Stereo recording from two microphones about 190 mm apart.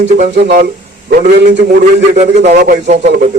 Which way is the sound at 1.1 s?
50° right (ahead or behind).